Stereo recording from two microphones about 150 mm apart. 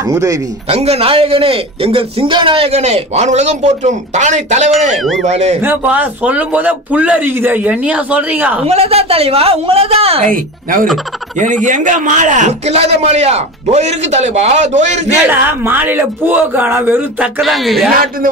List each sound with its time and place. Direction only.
0.0 s speech: 20° right (ahead or behind)
0.7 s a man's voice: 45° right (ahead or behind)
5.6 s a man's voice: 10° right (ahead or behind)
8.6 s a man's voice: 45° right (ahead or behind)
10.2 s a man's voice: 65° right (ahead or behind); by 15.1 s 50° right (ahead or behind)
15.2 s a man's voice: 15° right (ahead or behind)
17.4 s speech: centre (ahead or behind)